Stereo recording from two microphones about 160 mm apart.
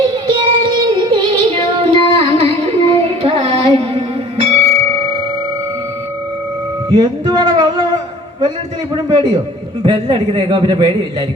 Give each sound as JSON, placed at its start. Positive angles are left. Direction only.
{"t": 0.6, "sound": "music", "side_deg": -30}
{"t": 6.9, "sound": "speech", "side_deg": -25}
{"t": 9.0, "sound": "a man's voice", "side_deg": -30}